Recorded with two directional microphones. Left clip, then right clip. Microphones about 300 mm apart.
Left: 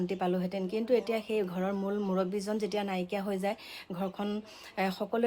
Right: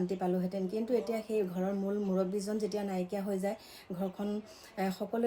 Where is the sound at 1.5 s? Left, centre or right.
Left.